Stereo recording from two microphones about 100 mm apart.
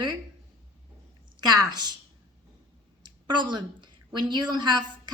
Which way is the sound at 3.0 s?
50° right (ahead or behind).